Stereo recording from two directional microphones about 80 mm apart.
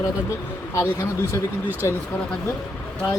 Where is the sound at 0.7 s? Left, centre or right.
Left.